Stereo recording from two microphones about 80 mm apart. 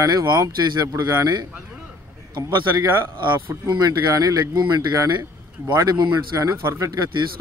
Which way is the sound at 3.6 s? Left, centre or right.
Right.